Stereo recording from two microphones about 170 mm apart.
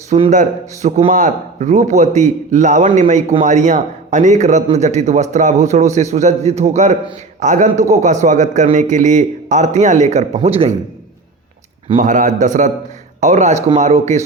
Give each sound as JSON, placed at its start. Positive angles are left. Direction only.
{"t": 0.2, "sound": "a man's voice", "side_deg": -45}
{"t": 11.9, "sound": "a man's voice", "side_deg": -50}